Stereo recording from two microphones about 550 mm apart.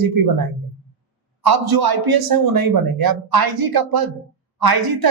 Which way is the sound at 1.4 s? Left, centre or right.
Right.